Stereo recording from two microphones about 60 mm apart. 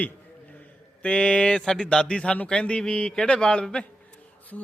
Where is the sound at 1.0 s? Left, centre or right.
Left.